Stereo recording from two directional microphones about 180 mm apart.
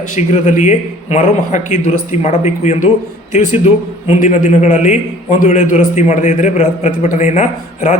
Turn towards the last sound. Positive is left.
turn(degrees=40)  # may be behind; listen again after turning